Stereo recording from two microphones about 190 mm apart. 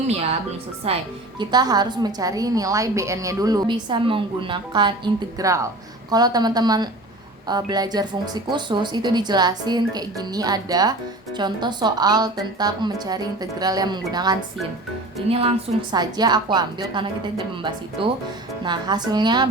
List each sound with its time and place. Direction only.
0.8 s speech: 30° right (ahead or behind)
1.4 s a woman's voice: 20° right (ahead or behind)